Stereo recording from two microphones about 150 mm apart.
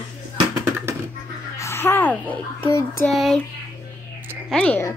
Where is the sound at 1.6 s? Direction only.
15° left (ahead or behind).